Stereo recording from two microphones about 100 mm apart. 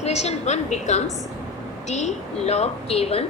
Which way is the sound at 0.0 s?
90° left.